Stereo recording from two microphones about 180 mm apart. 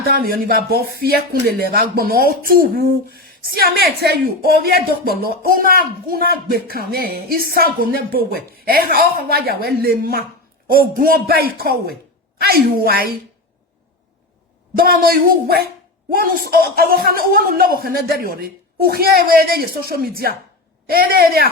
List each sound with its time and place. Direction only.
0.0 s speech: 55° right (ahead or behind)
14.8 s speech: 55° right (ahead or behind)